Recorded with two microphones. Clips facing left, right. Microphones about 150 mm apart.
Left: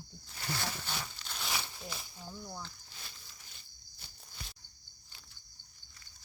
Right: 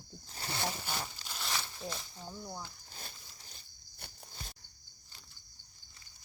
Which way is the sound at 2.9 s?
40° right (ahead or behind).